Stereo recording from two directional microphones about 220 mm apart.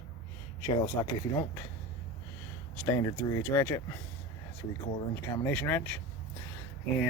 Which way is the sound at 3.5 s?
10° left (ahead or behind).